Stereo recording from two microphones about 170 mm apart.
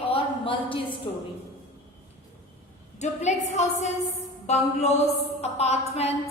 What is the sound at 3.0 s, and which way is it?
A woman's voice, 40° left (ahead or behind).